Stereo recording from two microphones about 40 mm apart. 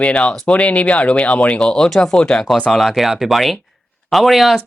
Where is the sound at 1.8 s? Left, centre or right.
Centre.